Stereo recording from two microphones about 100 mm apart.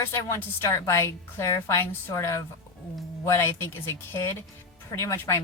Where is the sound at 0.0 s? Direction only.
30° left (ahead or behind).